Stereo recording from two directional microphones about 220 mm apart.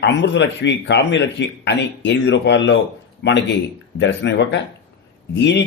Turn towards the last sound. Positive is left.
turn(degrees=55)  # may be behind; listen again after turning